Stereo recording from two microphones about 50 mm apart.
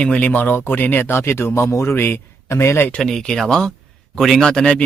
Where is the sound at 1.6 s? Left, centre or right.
Left.